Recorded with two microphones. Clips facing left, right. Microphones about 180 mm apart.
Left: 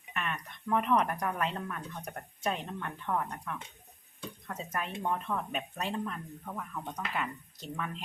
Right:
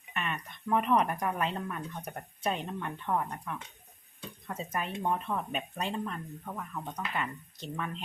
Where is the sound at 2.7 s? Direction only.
10° right (ahead or behind).